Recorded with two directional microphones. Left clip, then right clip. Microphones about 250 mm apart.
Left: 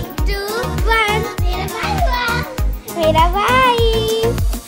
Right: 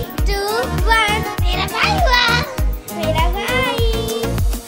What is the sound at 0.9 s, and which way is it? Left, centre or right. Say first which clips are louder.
Music: even; centre.